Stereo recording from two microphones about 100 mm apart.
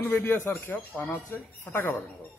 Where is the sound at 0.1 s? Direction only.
20° left (ahead or behind).